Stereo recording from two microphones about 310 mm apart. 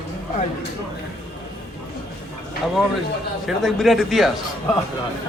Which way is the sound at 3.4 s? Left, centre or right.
Centre.